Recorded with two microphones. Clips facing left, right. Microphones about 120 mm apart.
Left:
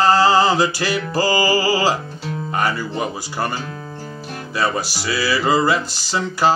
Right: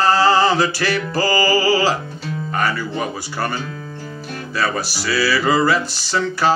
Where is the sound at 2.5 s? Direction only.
15° left (ahead or behind).